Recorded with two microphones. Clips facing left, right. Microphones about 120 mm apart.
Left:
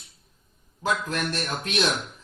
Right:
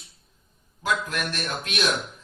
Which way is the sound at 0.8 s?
35° left (ahead or behind).